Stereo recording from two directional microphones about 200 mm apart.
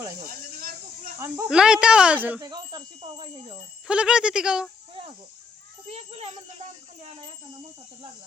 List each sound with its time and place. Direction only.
0.3 s a sound: 45° right (ahead or behind)
1.5 s speech: 5° right (ahead or behind)
2.4 s speech: 20° right (ahead or behind)
3.8 s speech: 5° right (ahead or behind)
5.9 s speech: 30° right (ahead or behind)